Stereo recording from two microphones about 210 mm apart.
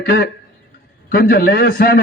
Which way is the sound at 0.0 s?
45° left (ahead or behind).